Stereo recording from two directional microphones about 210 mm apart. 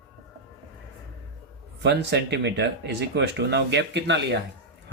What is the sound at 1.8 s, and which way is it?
Speech, 55° right (ahead or behind).